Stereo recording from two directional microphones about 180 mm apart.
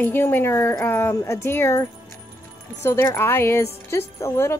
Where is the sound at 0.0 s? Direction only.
10° left (ahead or behind).